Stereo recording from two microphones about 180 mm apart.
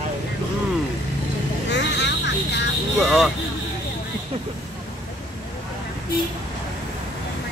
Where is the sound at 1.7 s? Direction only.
75° left (ahead or behind).